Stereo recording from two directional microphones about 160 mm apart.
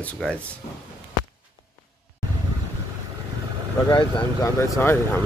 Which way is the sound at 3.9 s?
20° left (ahead or behind).